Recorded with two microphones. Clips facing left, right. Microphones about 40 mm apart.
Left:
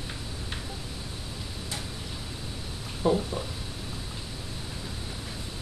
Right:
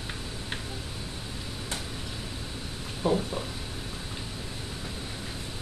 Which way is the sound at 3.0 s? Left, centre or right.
Centre.